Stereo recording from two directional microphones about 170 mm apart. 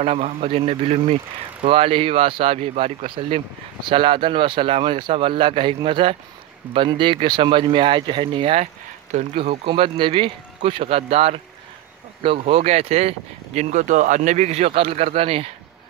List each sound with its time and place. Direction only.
0.0 s speech: 35° right (ahead or behind)
9.1 s speech: 45° right (ahead or behind)
9.4 s speech: 30° right (ahead or behind)